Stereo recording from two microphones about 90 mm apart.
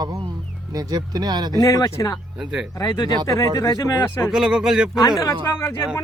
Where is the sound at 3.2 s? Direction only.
40° left (ahead or behind).